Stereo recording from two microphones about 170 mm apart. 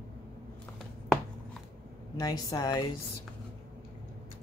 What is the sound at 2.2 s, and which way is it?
Speech, 25° left (ahead or behind).